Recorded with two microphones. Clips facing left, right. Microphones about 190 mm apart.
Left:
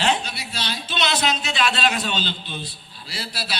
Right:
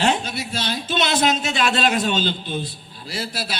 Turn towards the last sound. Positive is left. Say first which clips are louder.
# right 4 dB
turn(degrees=-50)  # may be behind; listen again after turning